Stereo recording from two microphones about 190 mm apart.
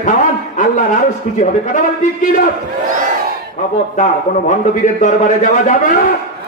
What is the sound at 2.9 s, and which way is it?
Crowd, 45° right (ahead or behind).